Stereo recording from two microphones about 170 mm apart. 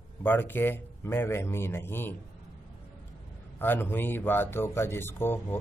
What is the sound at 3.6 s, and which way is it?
Speech, 10° left (ahead or behind).